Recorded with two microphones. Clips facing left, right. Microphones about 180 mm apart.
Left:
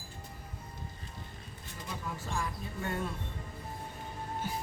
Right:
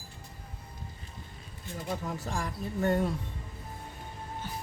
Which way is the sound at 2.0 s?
40° right (ahead or behind).